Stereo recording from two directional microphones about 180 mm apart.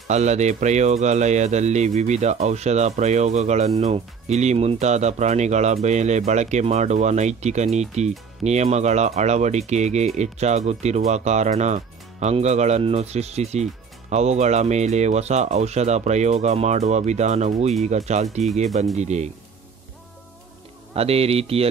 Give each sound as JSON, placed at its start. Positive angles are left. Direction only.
{"t": 0.1, "sound": "speech", "side_deg": -40}
{"t": 20.9, "sound": "speech", "side_deg": -35}